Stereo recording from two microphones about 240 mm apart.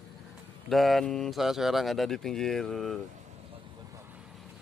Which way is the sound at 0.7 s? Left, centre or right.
Centre.